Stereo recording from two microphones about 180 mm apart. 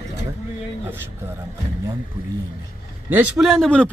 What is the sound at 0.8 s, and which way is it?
Speech, 15° right (ahead or behind).